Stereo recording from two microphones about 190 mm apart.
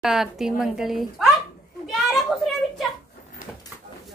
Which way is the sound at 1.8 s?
Centre (ahead or behind).